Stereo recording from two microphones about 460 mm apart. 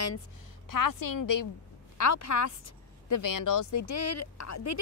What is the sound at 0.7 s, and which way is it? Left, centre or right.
A woman's voice, left.